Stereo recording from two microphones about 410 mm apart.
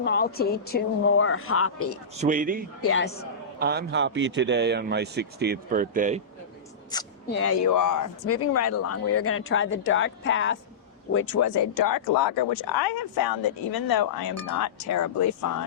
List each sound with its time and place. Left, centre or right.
0.0 s a woman's voice: left
2.1 s speech: centre
2.8 s a woman's voice: left
3.6 s speech: right
6.9 s speech: centre
7.3 s speech: left
14.3 s speech: left